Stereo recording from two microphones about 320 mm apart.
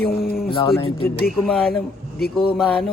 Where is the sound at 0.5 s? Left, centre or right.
Centre.